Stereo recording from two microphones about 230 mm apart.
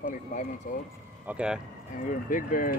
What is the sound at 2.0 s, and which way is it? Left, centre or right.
Speech, left.